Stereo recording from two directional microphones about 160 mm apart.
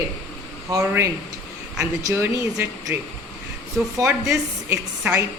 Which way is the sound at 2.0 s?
15° right (ahead or behind).